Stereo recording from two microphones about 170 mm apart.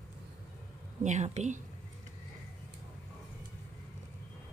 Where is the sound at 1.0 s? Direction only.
45° right (ahead or behind).